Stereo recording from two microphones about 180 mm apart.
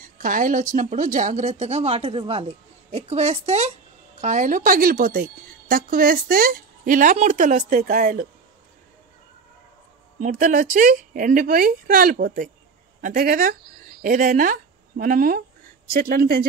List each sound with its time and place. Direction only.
0.0 s a woman's voice: 50° right (ahead or behind)
10.1 s a woman's voice: 45° right (ahead or behind)